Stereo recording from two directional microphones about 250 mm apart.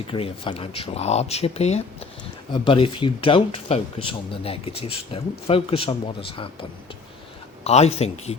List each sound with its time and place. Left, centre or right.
0.1 s speech: left